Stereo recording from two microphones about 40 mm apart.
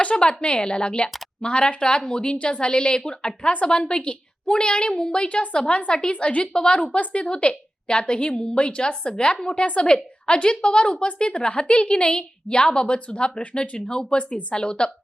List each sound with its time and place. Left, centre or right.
0.0 s a woman's voice: left
6.5 s a woman's voice: left
6.7 s a woman's voice: left